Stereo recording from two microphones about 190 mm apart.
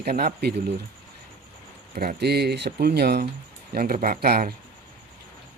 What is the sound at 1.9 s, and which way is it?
Speech, 55° right (ahead or behind).